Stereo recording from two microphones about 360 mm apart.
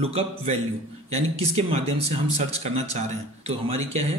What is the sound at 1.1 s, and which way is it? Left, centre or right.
Speech, centre.